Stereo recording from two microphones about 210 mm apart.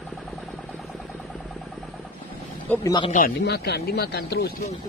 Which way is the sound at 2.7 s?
15° left (ahead or behind).